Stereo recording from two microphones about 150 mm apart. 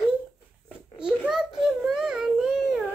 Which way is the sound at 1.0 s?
5° right (ahead or behind).